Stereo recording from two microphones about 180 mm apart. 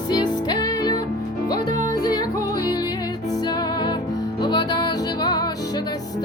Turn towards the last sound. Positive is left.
turn(degrees=20)  # may be behind; listen again after turning